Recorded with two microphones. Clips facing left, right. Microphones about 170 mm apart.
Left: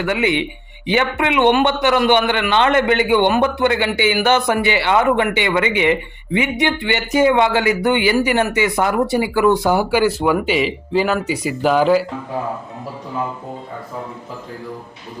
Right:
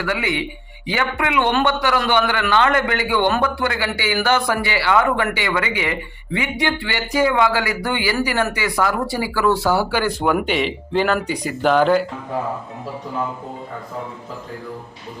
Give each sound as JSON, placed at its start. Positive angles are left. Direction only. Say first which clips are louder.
{"t": 0.0, "sound": "a man's voice", "louder": "left 4 dB", "side_deg": 20}
{"t": 10.4, "sound": "speech", "louder": "left 3 dB", "side_deg": 5}